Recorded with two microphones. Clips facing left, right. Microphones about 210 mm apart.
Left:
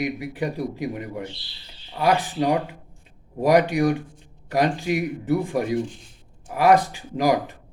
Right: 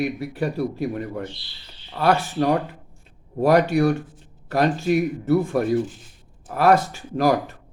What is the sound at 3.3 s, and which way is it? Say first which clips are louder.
A man's voice: right 1 dB; 15° left (ahead or behind).